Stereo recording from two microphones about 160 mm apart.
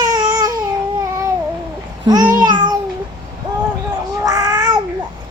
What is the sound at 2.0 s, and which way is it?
Babbling, 25° right (ahead or behind).